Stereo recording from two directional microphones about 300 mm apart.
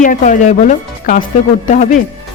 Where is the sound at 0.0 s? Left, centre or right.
Left.